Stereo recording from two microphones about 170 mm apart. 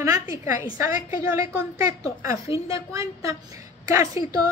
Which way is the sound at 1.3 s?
15° right (ahead or behind).